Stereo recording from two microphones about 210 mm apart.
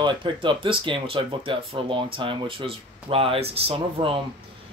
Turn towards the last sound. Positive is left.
turn(degrees=-25)  # may be behind; listen again after turning